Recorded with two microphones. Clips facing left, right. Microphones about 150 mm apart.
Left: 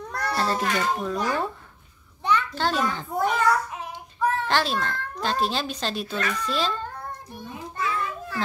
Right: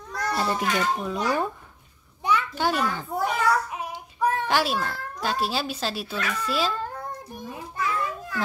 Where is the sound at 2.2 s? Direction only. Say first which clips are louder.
Even; 10° right (ahead or behind).